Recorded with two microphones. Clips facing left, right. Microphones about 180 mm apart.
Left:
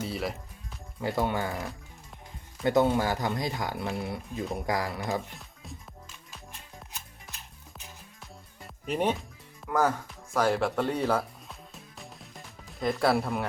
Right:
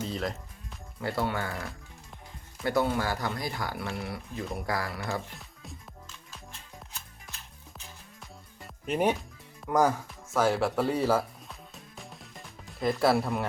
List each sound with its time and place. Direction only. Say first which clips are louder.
0.0 s music: even; 5° left (ahead or behind)
1.1 s speech: left 2 dB; 20° left (ahead or behind)
6.1 s music: even; 10° left (ahead or behind)
8.2 s music: even; centre (ahead or behind)